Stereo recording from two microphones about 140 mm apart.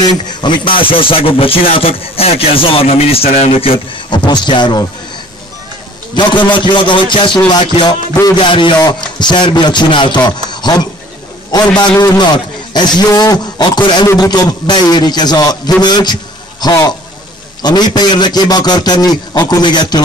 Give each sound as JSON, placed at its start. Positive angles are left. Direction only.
{"t": 0.3, "sound": "a man's voice", "side_deg": 35}
{"t": 6.1, "sound": "a man's voice", "side_deg": 35}